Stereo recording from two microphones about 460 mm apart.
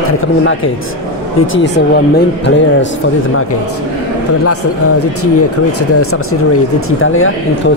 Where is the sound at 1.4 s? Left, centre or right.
Left.